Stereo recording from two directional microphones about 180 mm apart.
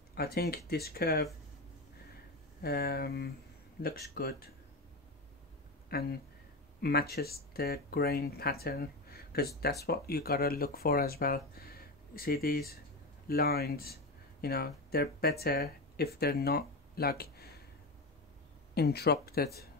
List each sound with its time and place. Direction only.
0.1 s speech: 60° left (ahead or behind)
2.6 s speech: 60° left (ahead or behind)
5.9 s speech: 60° left (ahead or behind)
18.8 s speech: 65° left (ahead or behind)